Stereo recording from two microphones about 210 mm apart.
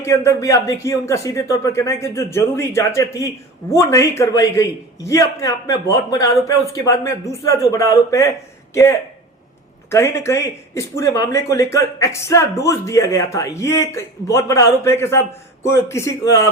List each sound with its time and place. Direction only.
0.0 s speech: 15° left (ahead or behind)